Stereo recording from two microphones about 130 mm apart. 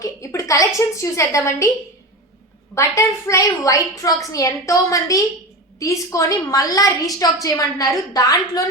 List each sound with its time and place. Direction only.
0.0 s a woman's voice: 25° left (ahead or behind)
2.7 s a woman's voice: 25° left (ahead or behind)